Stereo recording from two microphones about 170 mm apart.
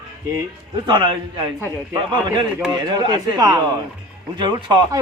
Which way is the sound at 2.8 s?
25° right (ahead or behind).